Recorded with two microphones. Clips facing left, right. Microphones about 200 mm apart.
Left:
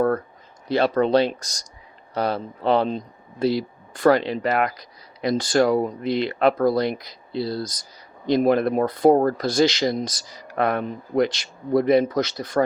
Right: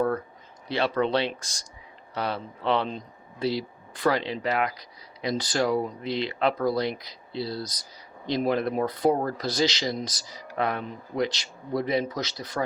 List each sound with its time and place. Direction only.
0.7 s speech: 40° left (ahead or behind)